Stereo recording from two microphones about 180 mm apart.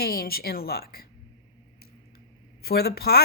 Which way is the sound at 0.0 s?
60° left (ahead or behind).